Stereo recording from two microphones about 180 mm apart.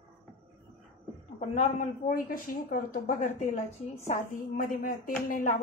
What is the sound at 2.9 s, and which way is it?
Speech, 45° left (ahead or behind).